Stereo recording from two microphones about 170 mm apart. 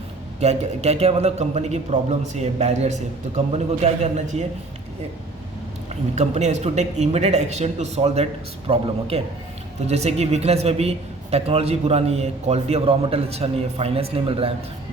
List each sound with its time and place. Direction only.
0.3 s a man's voice: 40° right (ahead or behind)
6.1 s a man's voice: 40° right (ahead or behind)